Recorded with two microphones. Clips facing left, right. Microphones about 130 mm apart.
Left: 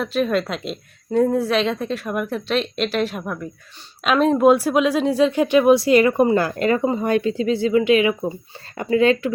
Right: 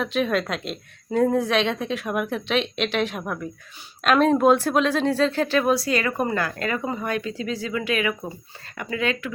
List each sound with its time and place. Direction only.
0.0 s a woman's voice: centre (ahead or behind); by 9.3 s 30° left (ahead or behind)